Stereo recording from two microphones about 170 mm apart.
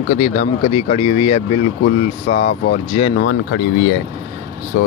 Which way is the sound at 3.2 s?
80° left.